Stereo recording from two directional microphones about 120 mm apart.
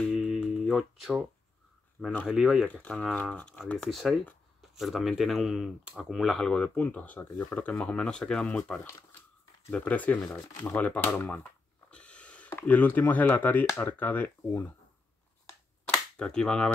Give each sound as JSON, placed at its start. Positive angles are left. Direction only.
{"t": 0.1, "sound": "a sound", "side_deg": -5}
{"t": 2.2, "sound": "speech", "side_deg": -5}
{"t": 2.7, "sound": "speech", "side_deg": 10}
{"t": 10.3, "sound": "speech", "side_deg": 20}
{"t": 10.7, "sound": "speech", "side_deg": 10}
{"t": 16.2, "sound": "speech", "side_deg": 5}